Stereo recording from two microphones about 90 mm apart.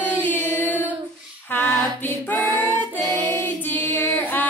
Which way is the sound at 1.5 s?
20° left (ahead or behind).